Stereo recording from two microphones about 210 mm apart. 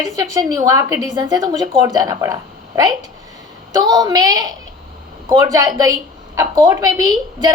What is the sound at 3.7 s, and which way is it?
A woman's voice, 20° right (ahead or behind).